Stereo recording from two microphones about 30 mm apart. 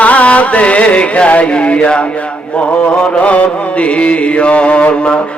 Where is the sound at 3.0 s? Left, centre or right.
Left.